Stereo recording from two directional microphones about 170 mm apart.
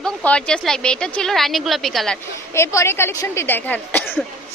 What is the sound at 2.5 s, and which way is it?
Speech, 15° left (ahead or behind).